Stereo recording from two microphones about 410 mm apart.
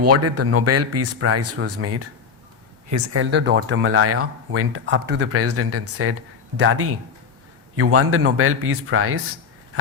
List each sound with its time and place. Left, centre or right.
0.0 s speech: right